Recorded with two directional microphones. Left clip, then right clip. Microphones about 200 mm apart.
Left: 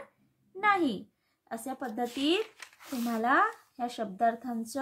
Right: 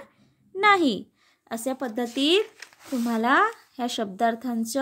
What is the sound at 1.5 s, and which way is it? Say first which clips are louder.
Speech: right 8 dB; 40° right (ahead or behind).